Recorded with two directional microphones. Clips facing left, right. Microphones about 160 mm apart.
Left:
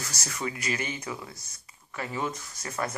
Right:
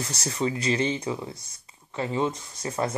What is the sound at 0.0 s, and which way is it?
Speech, 30° right (ahead or behind).